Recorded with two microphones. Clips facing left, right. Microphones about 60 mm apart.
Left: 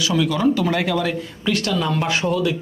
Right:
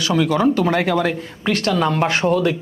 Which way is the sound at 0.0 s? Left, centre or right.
Right.